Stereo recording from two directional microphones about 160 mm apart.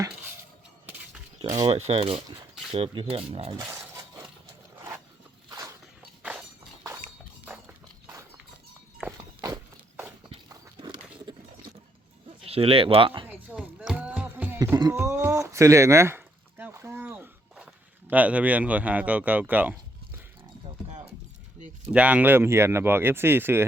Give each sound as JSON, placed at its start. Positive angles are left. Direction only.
{"t": 1.5, "sound": "speech", "side_deg": -25}
{"t": 1.7, "sound": "speech", "side_deg": -40}
{"t": 3.9, "sound": "shatter", "side_deg": -20}
{"t": 5.5, "sound": "a sound", "side_deg": -20}
{"t": 7.4, "sound": "a sound", "side_deg": -10}
{"t": 10.2, "sound": "horse", "side_deg": -35}
{"t": 11.3, "sound": "a sound", "side_deg": -30}
{"t": 12.5, "sound": "speech", "side_deg": -35}
{"t": 13.2, "sound": "music", "side_deg": -10}
{"t": 14.6, "sound": "a sound", "side_deg": -20}
{"t": 18.1, "sound": "speech", "side_deg": -10}
{"t": 21.9, "sound": "speech", "side_deg": -10}